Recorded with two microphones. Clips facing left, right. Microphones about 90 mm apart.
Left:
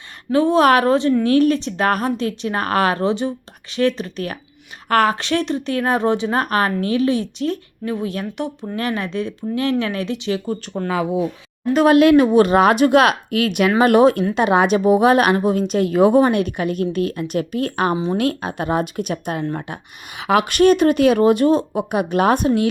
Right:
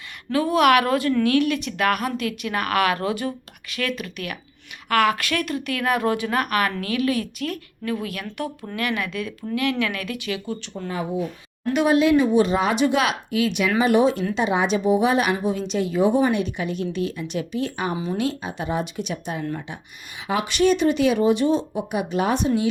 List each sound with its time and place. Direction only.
0.3 s a woman's voice: 25° left (ahead or behind)
5.1 s a woman's voice: 30° left (ahead or behind)
10.8 s speech: 90° left
11.9 s a woman's voice: 60° left (ahead or behind)
17.9 s speech: 25° left (ahead or behind)
18.2 s a woman's voice: 55° left (ahead or behind)
20.1 s a woman's voice: 70° left (ahead or behind); by 22.6 s 55° left (ahead or behind)